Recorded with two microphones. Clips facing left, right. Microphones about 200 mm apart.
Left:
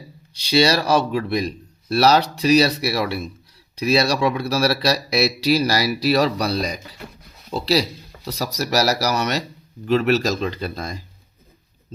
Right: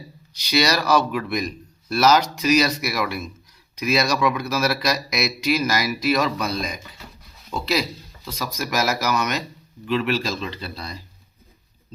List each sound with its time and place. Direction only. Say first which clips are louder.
0.3 s speech: left 4 dB; 30° left (ahead or behind); by 11.0 s 45° left (ahead or behind)